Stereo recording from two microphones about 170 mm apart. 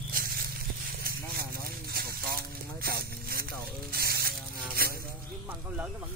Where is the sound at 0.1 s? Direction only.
60° right (ahead or behind).